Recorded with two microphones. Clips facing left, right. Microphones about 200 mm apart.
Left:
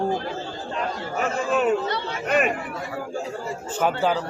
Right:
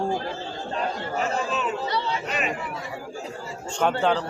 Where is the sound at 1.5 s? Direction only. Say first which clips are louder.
Left 6 dB; 55° left (ahead or behind).